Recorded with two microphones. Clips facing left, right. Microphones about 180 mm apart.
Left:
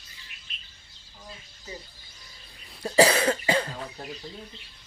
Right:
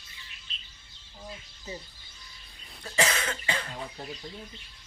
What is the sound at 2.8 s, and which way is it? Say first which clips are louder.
Cough: left 9 dB; 35° left (ahead or behind).